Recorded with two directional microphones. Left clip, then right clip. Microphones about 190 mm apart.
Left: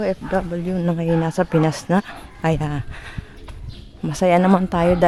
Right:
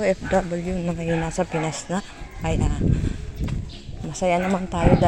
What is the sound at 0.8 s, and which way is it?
Speech, 25° left (ahead or behind).